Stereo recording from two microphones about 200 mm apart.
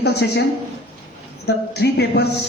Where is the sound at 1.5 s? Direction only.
55° left (ahead or behind).